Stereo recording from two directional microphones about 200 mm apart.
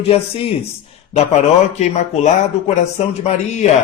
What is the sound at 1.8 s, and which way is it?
Speech, 35° left (ahead or behind).